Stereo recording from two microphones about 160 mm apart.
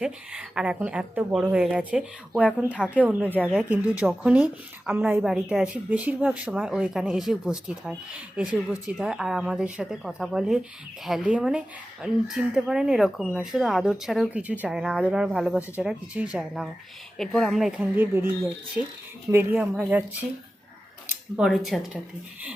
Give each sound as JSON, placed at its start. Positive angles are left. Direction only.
{"t": 0.0, "sound": "speech", "side_deg": -5}
{"t": 17.2, "sound": "speech", "side_deg": 5}
{"t": 19.3, "sound": "speech", "side_deg": -15}
{"t": 21.3, "sound": "speech", "side_deg": 0}